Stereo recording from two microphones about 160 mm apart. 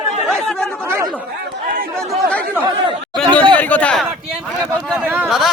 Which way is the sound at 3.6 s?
10° left (ahead or behind).